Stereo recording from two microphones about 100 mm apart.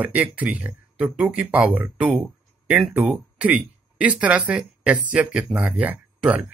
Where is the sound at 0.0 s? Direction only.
15° right (ahead or behind).